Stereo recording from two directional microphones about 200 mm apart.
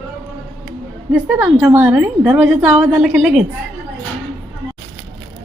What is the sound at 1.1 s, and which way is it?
A woman's voice, 10° right (ahead or behind).